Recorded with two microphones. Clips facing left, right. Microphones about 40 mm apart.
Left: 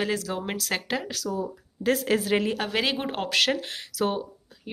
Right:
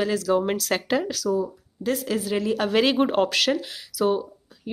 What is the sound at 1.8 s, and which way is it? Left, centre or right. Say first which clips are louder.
Speech: left 2 dB; left.